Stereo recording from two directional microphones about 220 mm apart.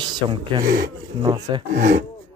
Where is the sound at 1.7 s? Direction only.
45° right (ahead or behind).